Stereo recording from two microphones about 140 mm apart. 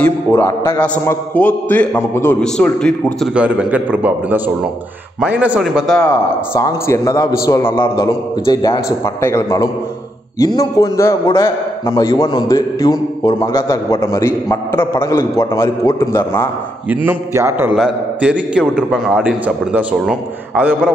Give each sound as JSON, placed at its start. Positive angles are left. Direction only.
{"t": 0.3, "sound": "a man's voice", "side_deg": 20}
{"t": 2.4, "sound": "a man's voice", "side_deg": 5}
{"t": 3.3, "sound": "a man's voice", "side_deg": -10}
{"t": 6.0, "sound": "a man's voice", "side_deg": 20}
{"t": 16.9, "sound": "a man's voice", "side_deg": -15}
{"t": 17.7, "sound": "a man's voice", "side_deg": -5}